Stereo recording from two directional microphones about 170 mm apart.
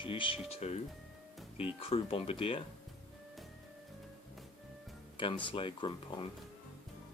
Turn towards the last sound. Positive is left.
turn(degrees=30)  # may be behind; listen again after turning